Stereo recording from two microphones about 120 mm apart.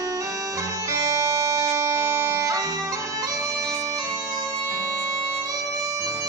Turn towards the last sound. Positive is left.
turn(degrees=-30)  # may be behind; listen again after turning